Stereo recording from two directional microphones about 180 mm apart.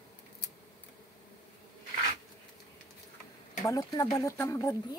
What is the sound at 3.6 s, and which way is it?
Speech, 20° left (ahead or behind).